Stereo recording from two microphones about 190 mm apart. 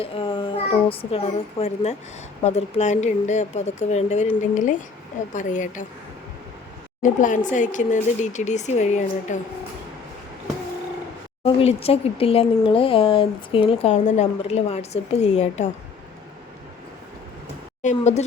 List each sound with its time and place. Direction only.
0.0 s a child's voice: 30° left (ahead or behind)
7.0 s speech: 45° left (ahead or behind)
11.4 s speech: 30° left (ahead or behind)
17.8 s speech: 35° left (ahead or behind)